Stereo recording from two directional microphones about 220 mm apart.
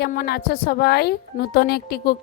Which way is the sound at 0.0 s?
45° left (ahead or behind).